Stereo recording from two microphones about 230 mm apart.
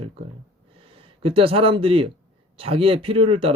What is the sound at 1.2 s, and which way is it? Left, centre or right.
Speech, right.